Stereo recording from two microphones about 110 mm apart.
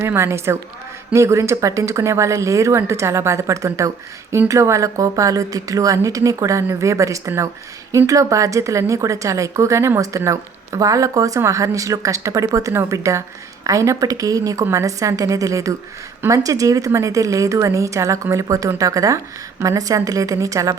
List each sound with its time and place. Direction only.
0.0 s a woman's voice: 25° right (ahead or behind)